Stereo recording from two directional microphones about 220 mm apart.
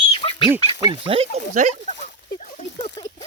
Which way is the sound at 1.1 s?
30° right (ahead or behind).